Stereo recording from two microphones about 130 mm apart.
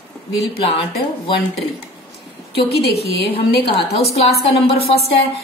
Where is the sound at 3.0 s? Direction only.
45° left (ahead or behind).